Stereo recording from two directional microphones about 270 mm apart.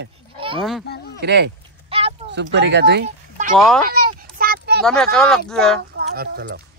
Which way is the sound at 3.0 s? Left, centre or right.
Right.